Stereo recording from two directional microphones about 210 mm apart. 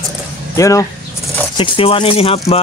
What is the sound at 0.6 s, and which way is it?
Speech, 15° left (ahead or behind).